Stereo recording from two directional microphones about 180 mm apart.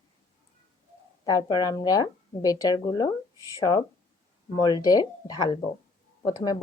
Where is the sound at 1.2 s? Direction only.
20° left (ahead or behind).